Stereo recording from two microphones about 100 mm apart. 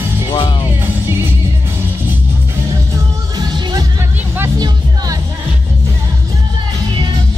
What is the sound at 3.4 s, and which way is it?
Music, 45° right (ahead or behind).